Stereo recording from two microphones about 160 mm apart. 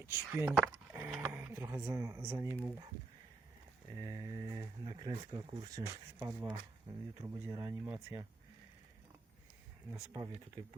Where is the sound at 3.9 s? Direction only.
20° right (ahead or behind).